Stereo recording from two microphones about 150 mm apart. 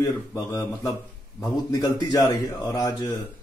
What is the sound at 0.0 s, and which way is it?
A man's voice, 20° left (ahead or behind).